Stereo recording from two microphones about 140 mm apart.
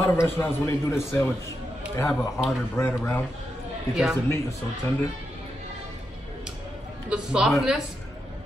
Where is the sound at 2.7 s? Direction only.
15° left (ahead or behind).